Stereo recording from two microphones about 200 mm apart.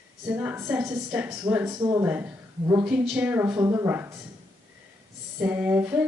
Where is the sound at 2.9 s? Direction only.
5° right (ahead or behind).